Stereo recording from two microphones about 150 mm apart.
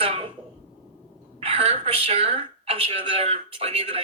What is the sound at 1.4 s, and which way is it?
A woman's voice, 40° right (ahead or behind).